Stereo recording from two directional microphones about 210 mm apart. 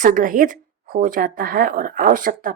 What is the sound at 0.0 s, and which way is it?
Speech, 40° right (ahead or behind).